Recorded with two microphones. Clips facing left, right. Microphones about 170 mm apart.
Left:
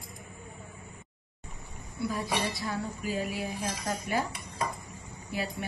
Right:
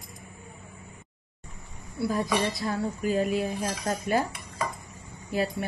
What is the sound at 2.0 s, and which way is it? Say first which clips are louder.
Speech: right 5 dB; 40° right (ahead or behind).